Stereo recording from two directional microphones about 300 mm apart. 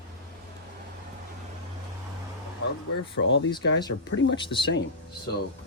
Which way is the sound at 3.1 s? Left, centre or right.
Left.